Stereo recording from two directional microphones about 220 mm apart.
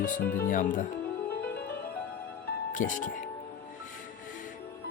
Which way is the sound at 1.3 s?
45° left (ahead or behind).